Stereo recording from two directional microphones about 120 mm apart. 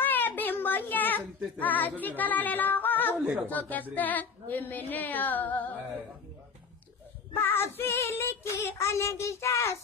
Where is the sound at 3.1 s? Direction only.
10° right (ahead or behind).